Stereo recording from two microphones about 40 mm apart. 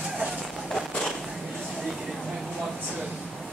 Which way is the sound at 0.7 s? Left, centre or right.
Centre.